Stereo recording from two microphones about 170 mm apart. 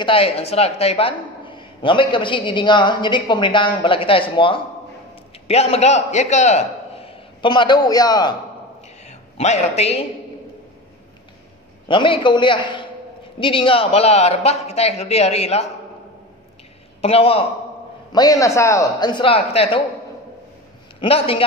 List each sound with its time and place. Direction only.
0.0 s a woman's voice: 35° left (ahead or behind)
9.0 s a man's voice: 40° left (ahead or behind)
11.9 s a woman's voice: 30° left (ahead or behind)
17.0 s a man's voice: 35° left (ahead or behind)
18.1 s a woman's voice: 20° left (ahead or behind)
21.0 s a man's voice: 30° left (ahead or behind)